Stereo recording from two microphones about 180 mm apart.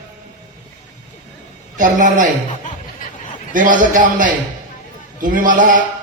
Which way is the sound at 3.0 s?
50° left (ahead or behind).